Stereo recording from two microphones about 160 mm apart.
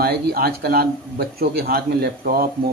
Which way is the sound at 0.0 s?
75° right (ahead or behind).